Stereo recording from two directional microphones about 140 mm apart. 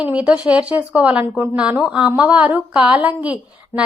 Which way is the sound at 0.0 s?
10° right (ahead or behind).